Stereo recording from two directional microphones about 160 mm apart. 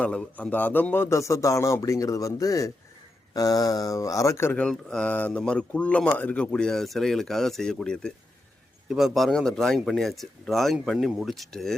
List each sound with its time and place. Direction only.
0.0 s speech: 5° left (ahead or behind)